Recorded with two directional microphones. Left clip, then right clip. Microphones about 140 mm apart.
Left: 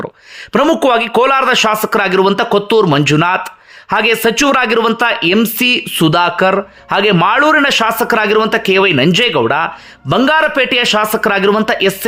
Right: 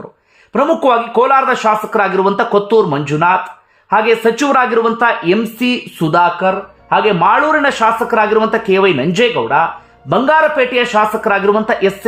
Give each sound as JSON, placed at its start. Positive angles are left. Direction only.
{"t": 0.5, "sound": "a man's voice", "side_deg": 25}
{"t": 8.4, "sound": "a man's voice", "side_deg": 20}
{"t": 9.1, "sound": "speech", "side_deg": 40}
{"t": 10.1, "sound": "a man's voice", "side_deg": 25}
{"t": 11.6, "sound": "a man's voice", "side_deg": 20}